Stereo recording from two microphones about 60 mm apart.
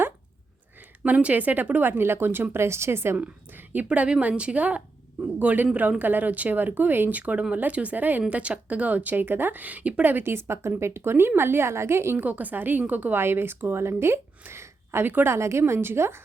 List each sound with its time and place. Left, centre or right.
1.0 s speech: right
3.2 s a woman's voice: right
12.1 s speech: right
13.1 s speech: right
15.0 s speech: right
15.3 s a woman's voice: right